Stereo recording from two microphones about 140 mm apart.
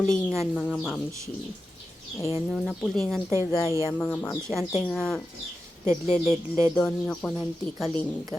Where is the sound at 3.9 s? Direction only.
10° left (ahead or behind).